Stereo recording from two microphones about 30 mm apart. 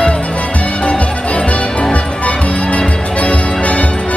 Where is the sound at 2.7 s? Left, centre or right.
Left.